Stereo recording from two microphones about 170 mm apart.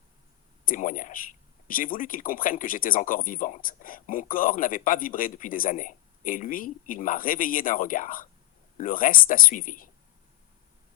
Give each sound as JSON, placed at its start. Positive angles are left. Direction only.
{"t": 0.6, "sound": "speech", "side_deg": 55}